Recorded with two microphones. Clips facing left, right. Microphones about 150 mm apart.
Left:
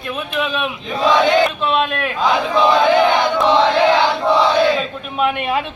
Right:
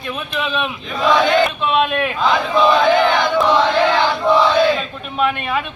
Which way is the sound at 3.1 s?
25° left (ahead or behind).